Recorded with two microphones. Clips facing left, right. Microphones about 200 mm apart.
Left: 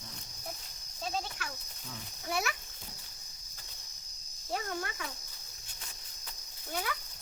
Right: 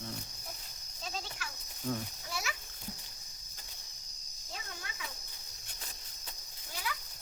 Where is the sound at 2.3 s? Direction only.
60° left (ahead or behind).